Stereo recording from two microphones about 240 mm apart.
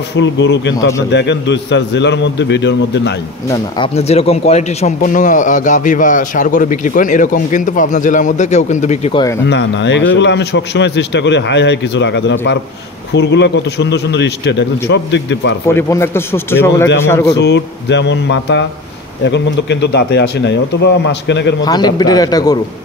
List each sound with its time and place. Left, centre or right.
0.1 s speech: left
3.4 s speech: left
9.5 s speech: left
15.7 s a man's voice: centre
17.3 s speech: left
21.6 s a man's voice: centre